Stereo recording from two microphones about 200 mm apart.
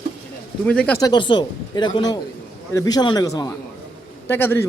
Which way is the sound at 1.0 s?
20° left (ahead or behind).